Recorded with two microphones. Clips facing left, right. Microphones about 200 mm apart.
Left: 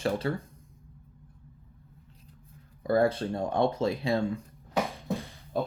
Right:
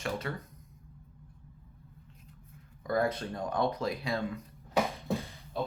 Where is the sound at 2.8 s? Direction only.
30° left (ahead or behind).